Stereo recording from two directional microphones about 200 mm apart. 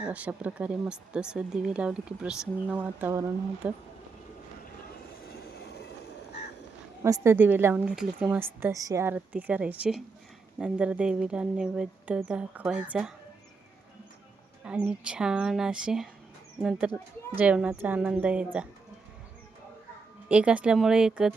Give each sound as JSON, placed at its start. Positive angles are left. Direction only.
{"t": 0.0, "sound": "speech", "side_deg": -5}
{"t": 5.5, "sound": "train", "side_deg": 55}
{"t": 7.0, "sound": "a woman's voice", "side_deg": -15}
{"t": 14.8, "sound": "a woman's voice", "side_deg": -5}
{"t": 20.2, "sound": "speech", "side_deg": -5}